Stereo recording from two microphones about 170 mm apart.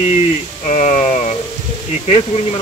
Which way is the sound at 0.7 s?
40° left (ahead or behind).